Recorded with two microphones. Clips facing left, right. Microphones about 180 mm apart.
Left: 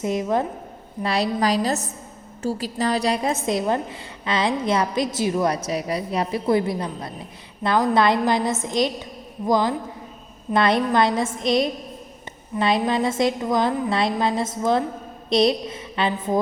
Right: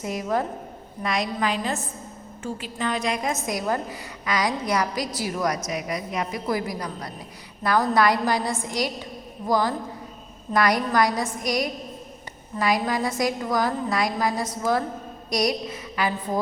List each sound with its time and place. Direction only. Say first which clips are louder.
0.0 s a woman's voice: left 4 dB; 20° left (ahead or behind)
1.0 s a woman's voice: left 4 dB; 35° left (ahead or behind)